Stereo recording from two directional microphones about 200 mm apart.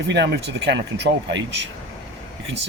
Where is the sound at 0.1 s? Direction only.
55° right (ahead or behind).